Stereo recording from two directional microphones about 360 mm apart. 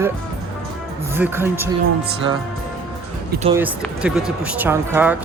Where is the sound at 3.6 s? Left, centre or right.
Centre.